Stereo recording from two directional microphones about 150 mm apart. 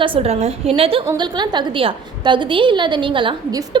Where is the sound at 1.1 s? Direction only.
30° right (ahead or behind).